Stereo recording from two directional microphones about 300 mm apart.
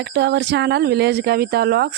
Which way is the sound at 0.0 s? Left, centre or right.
Right.